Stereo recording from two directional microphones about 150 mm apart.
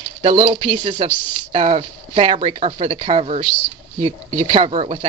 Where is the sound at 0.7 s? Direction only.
30° right (ahead or behind).